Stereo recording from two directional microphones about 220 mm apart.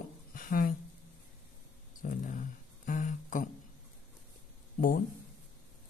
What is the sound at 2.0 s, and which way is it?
Speech, 35° left (ahead or behind).